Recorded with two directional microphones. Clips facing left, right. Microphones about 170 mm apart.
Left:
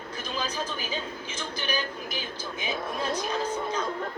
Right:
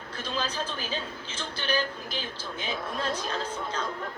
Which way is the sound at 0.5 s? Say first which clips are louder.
Left 1 dB; 10° left (ahead or behind).